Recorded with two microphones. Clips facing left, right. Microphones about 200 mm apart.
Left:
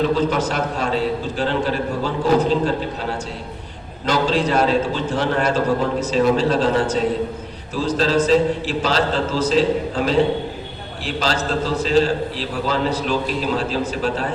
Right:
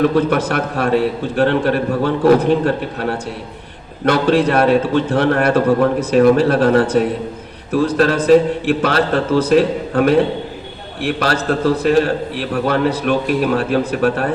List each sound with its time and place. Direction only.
0.0 s a man's voice: 60° right (ahead or behind)